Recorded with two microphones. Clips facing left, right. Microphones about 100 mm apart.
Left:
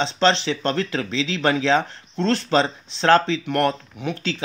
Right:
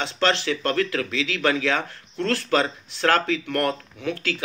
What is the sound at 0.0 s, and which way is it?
Speech, 25° left (ahead or behind).